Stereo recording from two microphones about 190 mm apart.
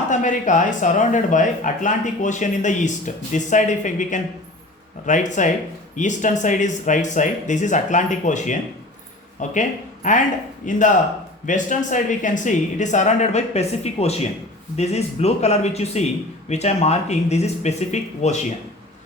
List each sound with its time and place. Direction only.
0.1 s speech: 40° left (ahead or behind)